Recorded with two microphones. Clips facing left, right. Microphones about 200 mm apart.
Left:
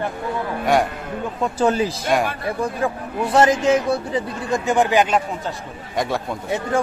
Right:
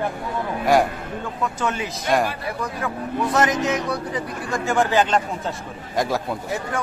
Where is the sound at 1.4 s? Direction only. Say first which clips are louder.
Left 7 dB; 35° left (ahead or behind); by 5.2 s 15° left (ahead or behind).